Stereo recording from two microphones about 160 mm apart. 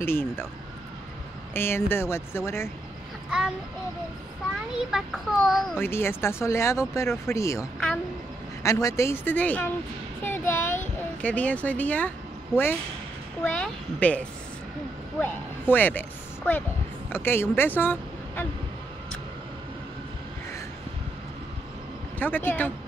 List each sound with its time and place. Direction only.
0.0 s speech: 15° left (ahead or behind)
1.5 s speech: 15° left (ahead or behind)
3.3 s a child's voice: 5° right (ahead or behind)
4.9 s a child's voice: centre (ahead or behind)
5.8 s speech: 15° left (ahead or behind)
8.6 s speech: 20° left (ahead or behind)
10.2 s a sound: 15° left (ahead or behind)
13.4 s speech: 10° left (ahead or behind)
22.2 s speech: 10° left (ahead or behind)